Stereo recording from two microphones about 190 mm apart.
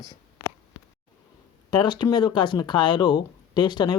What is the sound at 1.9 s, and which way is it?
Speech, 25° left (ahead or behind).